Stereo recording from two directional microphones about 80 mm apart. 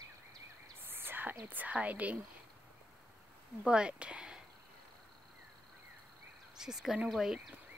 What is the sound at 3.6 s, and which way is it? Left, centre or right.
Speech, centre.